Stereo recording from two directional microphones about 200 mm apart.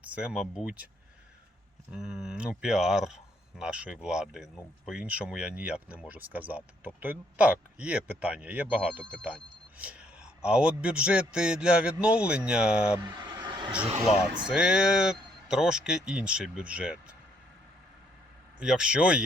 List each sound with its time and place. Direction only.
0.0 s speech: 5° right (ahead or behind)
1.9 s a man's voice: centre (ahead or behind)
13.0 s vehicle: 20° right (ahead or behind)
14.4 s a man's voice: 5° right (ahead or behind)
18.6 s a man's voice: 5° right (ahead or behind)